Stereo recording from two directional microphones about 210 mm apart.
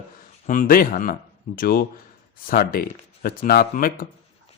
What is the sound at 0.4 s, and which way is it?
Speech, 40° left (ahead or behind).